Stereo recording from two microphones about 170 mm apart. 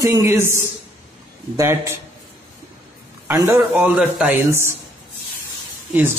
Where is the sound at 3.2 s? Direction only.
15° right (ahead or behind).